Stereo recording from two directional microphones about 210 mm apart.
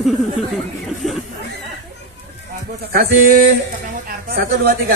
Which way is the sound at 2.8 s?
45° right (ahead or behind).